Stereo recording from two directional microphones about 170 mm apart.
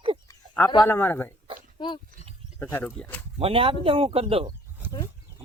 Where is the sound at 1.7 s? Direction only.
30° left (ahead or behind).